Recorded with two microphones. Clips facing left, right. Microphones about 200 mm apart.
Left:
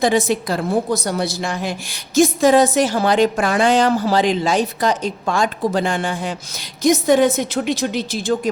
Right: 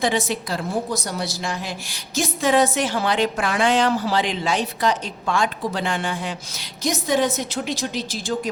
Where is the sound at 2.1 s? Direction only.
40° left (ahead or behind).